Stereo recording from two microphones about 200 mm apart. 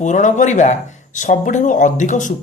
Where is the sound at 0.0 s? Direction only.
40° left (ahead or behind).